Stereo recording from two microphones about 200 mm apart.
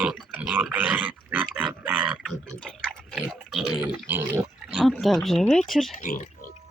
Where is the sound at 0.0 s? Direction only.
5° right (ahead or behind).